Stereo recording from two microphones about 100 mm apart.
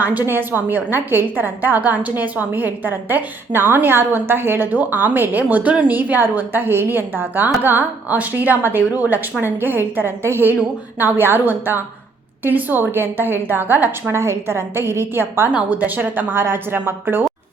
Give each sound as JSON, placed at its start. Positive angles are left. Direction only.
{"t": 0.0, "sound": "a woman's voice", "side_deg": -15}